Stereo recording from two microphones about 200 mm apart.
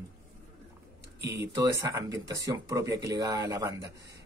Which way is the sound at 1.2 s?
15° right (ahead or behind).